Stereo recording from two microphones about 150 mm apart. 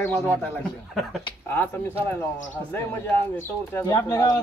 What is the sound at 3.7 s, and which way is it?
Speech, 15° left (ahead or behind).